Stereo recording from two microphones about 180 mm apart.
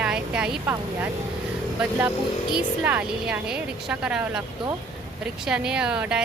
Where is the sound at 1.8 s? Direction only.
5° right (ahead or behind).